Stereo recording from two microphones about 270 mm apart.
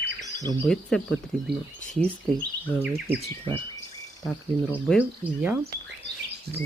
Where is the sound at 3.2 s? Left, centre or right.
Centre.